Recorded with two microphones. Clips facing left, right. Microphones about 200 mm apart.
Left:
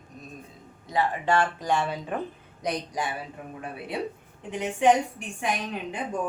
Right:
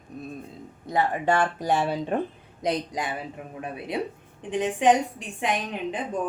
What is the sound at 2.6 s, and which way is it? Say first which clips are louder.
A woman's voice: right 3 dB; 20° right (ahead or behind).